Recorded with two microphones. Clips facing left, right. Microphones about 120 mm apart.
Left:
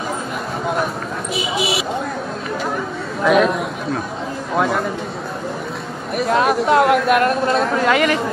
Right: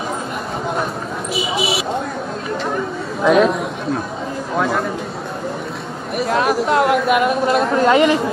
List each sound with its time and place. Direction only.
1.3 s speech: centre (ahead or behind)
2.7 s chatter: centre (ahead or behind)
4.6 s speech: centre (ahead or behind)
6.1 s speech: centre (ahead or behind)
7.9 s speech: 25° right (ahead or behind)